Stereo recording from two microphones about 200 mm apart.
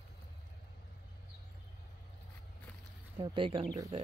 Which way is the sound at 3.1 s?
25° right (ahead or behind).